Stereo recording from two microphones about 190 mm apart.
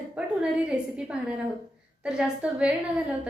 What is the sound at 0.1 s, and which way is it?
A woman's voice, 5° right (ahead or behind).